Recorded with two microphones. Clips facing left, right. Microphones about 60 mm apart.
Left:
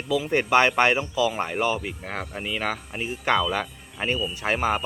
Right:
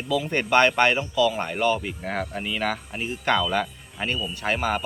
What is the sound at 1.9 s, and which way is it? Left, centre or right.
Speech, centre.